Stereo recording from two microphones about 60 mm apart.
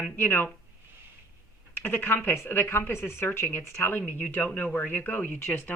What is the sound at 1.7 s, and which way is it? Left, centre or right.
Speech, left.